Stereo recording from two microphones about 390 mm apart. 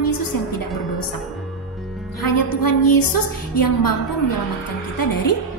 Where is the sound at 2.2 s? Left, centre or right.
Left.